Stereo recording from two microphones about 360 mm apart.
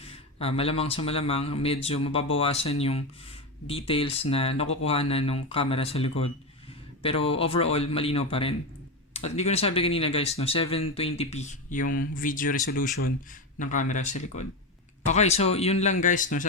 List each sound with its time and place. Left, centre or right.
0.0 s speech: centre